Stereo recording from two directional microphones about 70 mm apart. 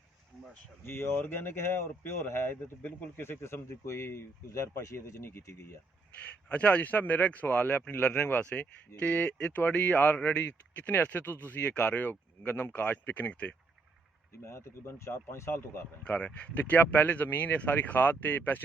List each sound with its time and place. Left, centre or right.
0.9 s speech: left
6.5 s speech: centre
14.3 s speech: left
16.0 s speech: centre